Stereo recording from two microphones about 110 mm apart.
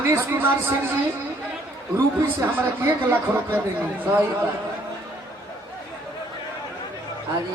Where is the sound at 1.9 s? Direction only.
25° right (ahead or behind).